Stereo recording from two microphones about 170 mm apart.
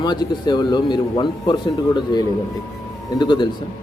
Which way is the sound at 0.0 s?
25° left (ahead or behind).